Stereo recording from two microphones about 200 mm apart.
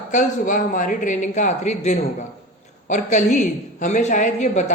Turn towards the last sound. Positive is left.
turn(degrees=35)  # may be behind; listen again after turning